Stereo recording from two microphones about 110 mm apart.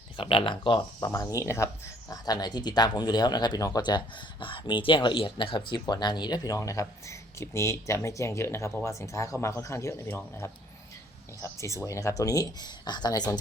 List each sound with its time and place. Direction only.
0.2 s speech: 50° left (ahead or behind)